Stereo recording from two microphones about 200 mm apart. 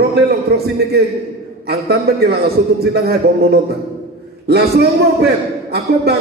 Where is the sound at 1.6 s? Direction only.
55° right (ahead or behind).